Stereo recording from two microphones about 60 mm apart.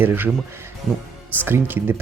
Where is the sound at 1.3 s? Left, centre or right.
Right.